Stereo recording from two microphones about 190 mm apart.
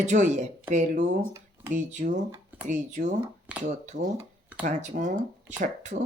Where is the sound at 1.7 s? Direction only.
40° right (ahead or behind).